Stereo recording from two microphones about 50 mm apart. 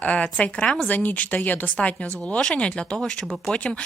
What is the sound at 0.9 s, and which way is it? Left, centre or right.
Speech, left.